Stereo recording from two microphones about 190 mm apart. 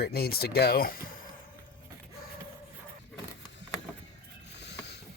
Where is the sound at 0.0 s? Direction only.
55° left (ahead or behind).